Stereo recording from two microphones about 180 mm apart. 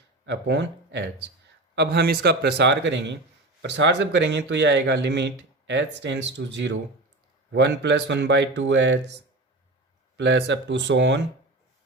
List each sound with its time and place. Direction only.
0.3 s speech: 75° right (ahead or behind)
10.2 s speech: 75° right (ahead or behind)